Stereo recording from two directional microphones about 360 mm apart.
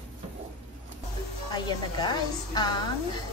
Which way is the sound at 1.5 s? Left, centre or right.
Centre.